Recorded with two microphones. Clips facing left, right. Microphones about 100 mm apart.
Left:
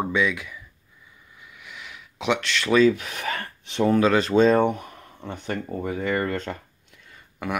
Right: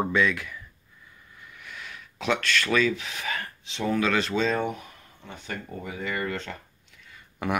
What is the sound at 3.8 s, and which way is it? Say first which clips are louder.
Speech: left 5 dB; 30° left (ahead or behind).